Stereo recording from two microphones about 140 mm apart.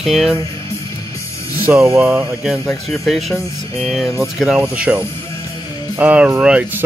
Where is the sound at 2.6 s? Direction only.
Centre (ahead or behind).